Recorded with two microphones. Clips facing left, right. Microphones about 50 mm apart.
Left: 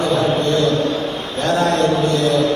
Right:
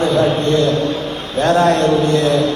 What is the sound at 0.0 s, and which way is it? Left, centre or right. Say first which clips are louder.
A man's voice: right 2 dB; right.